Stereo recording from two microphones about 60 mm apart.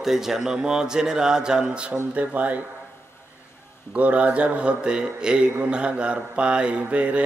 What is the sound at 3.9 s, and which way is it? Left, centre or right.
A man's voice, right.